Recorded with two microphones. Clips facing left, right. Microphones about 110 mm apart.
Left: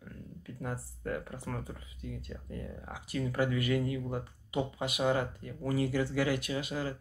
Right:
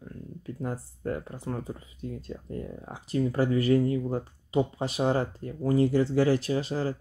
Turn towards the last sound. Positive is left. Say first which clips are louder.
# right 6 dB
turn(degrees=-35)  # may be behind; listen again after turning